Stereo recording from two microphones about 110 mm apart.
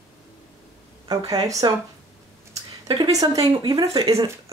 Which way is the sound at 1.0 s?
35° right (ahead or behind).